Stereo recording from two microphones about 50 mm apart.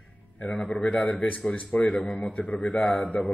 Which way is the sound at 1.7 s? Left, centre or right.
Left.